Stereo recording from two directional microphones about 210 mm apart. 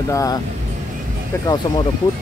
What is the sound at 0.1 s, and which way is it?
Speech, 15° left (ahead or behind).